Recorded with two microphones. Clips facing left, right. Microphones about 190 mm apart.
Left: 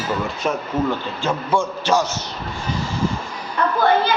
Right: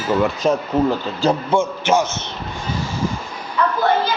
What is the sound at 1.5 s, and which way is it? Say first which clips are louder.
Speech: right 2 dB; 20° right (ahead or behind).